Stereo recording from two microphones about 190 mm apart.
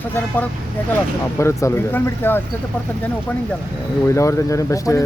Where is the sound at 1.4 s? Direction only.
15° left (ahead or behind).